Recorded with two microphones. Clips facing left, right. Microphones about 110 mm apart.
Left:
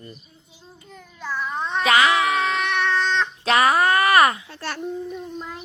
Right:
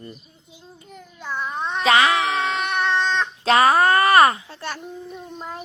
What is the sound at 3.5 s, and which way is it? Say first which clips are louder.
A woman's voice: right 2 dB; 30° right (ahead or behind).